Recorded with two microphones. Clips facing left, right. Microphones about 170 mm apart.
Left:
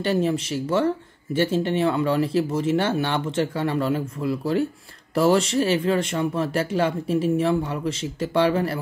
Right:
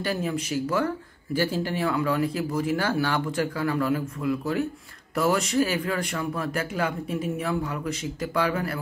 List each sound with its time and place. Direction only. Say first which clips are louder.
0.0 s speech: left 6 dB; 30° left (ahead or behind)